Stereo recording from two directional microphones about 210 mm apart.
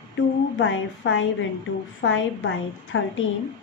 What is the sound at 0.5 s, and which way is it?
Speech, 65° left (ahead or behind).